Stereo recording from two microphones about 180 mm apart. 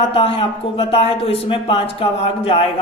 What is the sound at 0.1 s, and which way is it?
Speech, 30° left (ahead or behind).